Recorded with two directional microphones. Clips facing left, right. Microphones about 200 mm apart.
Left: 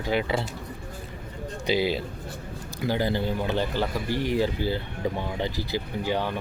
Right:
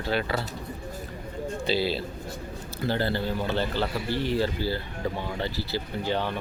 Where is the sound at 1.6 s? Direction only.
15° left (ahead or behind).